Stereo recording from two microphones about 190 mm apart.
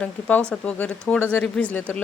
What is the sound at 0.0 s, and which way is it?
Speech, 10° left (ahead or behind).